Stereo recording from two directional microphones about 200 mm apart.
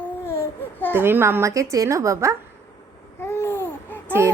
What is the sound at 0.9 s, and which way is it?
A woman's voice, 10° right (ahead or behind).